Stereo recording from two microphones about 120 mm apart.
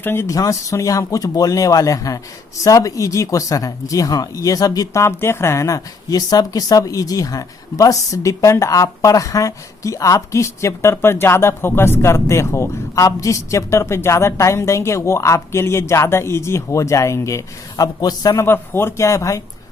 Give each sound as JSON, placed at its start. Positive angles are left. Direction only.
{"t": 0.0, "sound": "speech", "side_deg": 20}
{"t": 18.4, "sound": "speech", "side_deg": 20}